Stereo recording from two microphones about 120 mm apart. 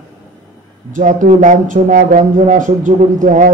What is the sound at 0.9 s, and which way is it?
Speech, 90° right.